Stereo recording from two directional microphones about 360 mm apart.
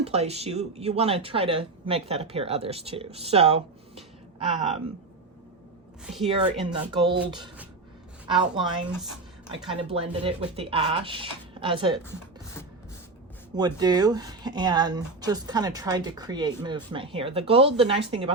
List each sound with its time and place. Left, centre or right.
0.0 s speech: centre
6.2 s speech: centre
13.6 s speech: centre